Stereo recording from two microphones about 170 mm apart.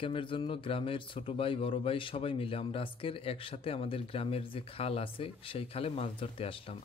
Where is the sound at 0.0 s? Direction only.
30° left (ahead or behind).